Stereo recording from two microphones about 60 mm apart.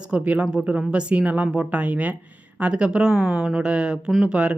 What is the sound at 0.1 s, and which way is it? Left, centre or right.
Speech, right.